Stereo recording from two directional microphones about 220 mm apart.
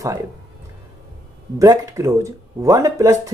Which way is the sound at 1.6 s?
15° right (ahead or behind).